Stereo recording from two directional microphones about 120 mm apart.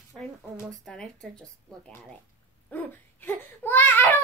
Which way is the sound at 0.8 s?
5° left (ahead or behind).